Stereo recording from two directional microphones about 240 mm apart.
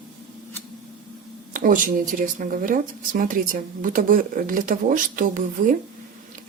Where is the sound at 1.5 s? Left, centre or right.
Right.